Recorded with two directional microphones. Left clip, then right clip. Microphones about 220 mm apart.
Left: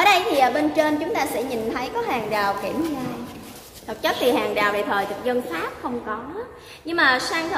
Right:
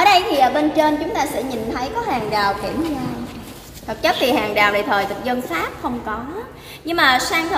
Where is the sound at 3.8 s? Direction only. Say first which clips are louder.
Right 3 dB; 25° right (ahead or behind).